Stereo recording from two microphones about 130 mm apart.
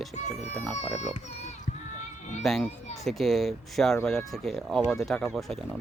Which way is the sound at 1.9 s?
70° left (ahead or behind).